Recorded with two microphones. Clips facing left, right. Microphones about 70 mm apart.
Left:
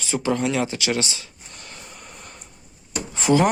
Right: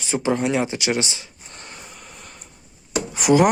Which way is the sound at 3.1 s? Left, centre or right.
Centre.